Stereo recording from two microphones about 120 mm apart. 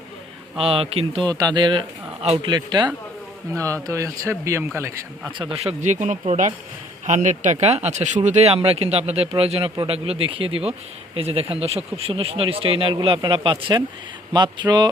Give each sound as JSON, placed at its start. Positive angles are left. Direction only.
{"t": 0.6, "sound": "speech", "side_deg": -50}
{"t": 1.2, "sound": "speech", "side_deg": -35}
{"t": 3.8, "sound": "speech", "side_deg": -25}
{"t": 5.5, "sound": "speech", "side_deg": -75}